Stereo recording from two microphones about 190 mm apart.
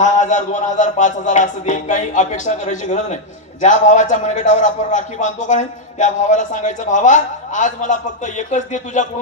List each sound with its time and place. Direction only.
0.0 s a man's voice: 40° left (ahead or behind)